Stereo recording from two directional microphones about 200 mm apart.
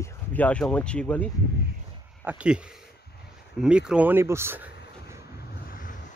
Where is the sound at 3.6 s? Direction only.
5° right (ahead or behind).